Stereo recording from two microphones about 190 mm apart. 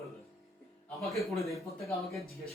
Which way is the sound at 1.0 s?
Centre (ahead or behind).